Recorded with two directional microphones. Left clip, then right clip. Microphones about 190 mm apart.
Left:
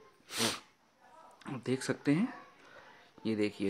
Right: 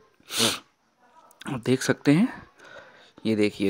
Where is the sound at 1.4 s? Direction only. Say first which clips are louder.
Right 11 dB; 45° right (ahead or behind).